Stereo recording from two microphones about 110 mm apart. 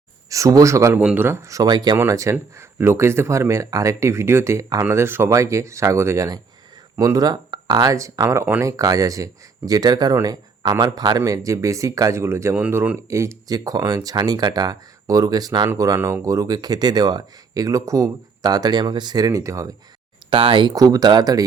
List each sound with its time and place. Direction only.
0.3 s speech: 30° right (ahead or behind)
0.9 s speech: 15° right (ahead or behind)
12.5 s speech: 15° right (ahead or behind)
13.1 s speech: 25° right (ahead or behind)
20.3 s speech: 50° right (ahead or behind)
20.7 s speech: 35° right (ahead or behind)